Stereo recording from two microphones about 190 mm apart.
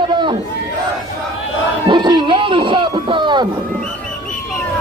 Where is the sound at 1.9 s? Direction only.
25° right (ahead or behind).